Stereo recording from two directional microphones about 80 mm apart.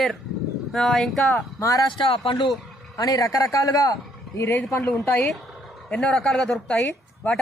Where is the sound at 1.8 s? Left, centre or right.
Left.